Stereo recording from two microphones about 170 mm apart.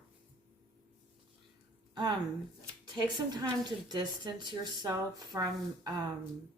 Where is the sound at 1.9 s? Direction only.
25° right (ahead or behind).